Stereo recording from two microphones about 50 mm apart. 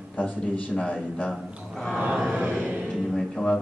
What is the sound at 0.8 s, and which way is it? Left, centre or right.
Speech, left.